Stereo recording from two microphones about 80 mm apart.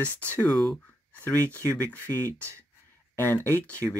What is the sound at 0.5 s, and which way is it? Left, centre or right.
Speech, centre.